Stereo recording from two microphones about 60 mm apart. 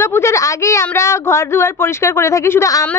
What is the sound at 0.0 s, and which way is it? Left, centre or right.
A woman's voice, left.